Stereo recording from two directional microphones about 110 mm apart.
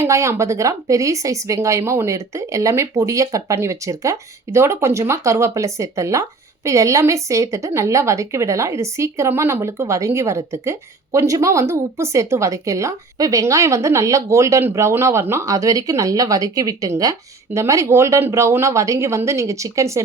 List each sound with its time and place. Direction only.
0.0 s a woman's voice: 25° right (ahead or behind)